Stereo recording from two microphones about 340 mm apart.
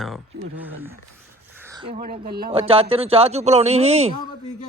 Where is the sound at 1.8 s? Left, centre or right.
Right.